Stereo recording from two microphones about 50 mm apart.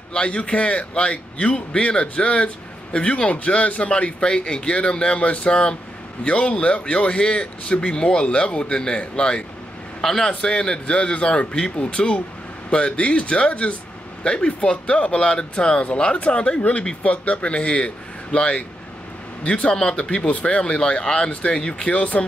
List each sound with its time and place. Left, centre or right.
0.1 s a man's voice: left